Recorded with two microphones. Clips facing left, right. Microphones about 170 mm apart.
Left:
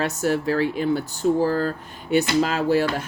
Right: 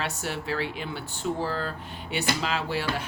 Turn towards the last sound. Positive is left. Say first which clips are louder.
# left 8 dB
turn(degrees=45)  # may be behind; listen again after turning